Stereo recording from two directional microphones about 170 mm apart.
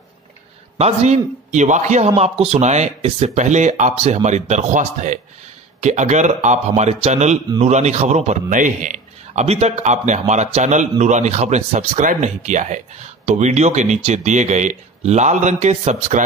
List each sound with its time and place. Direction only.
0.7 s a man's voice: 40° right (ahead or behind)